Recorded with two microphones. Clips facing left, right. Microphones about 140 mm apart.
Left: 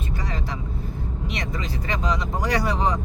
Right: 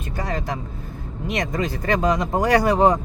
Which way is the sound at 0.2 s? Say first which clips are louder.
Right 9 dB; 50° right (ahead or behind).